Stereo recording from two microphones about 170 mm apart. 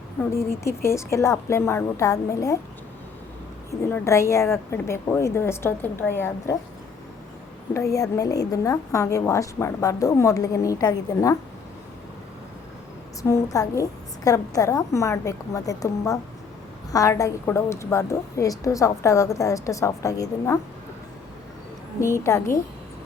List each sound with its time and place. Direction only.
0.2 s a woman's voice: 15° left (ahead or behind)
3.7 s a woman's voice: 15° left (ahead or behind)
7.7 s a woman's voice: 15° left (ahead or behind)
13.2 s a woman's voice: 20° left (ahead or behind)
22.0 s a woman's voice: 15° left (ahead or behind)